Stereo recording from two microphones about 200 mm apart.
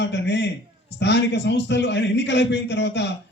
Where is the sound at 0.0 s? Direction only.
60° left (ahead or behind).